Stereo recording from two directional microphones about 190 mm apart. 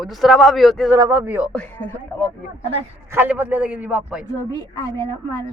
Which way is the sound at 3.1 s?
10° right (ahead or behind).